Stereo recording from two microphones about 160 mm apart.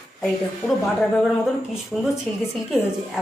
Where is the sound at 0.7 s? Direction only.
Centre (ahead or behind).